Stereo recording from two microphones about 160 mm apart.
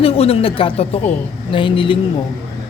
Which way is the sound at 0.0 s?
35° left (ahead or behind).